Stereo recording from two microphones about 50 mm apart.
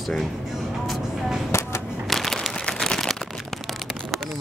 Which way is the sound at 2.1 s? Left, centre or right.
Centre.